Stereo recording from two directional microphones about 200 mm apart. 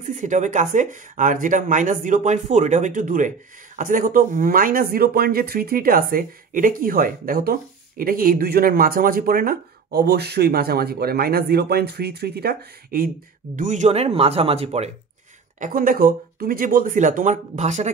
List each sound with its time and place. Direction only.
0.0 s speech: 40° right (ahead or behind)
13.6 s speech: 40° right (ahead or behind)
15.6 s speech: 45° right (ahead or behind)